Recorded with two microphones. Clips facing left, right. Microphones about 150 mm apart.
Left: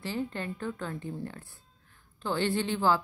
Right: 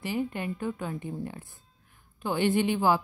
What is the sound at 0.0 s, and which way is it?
Speech, 15° right (ahead or behind).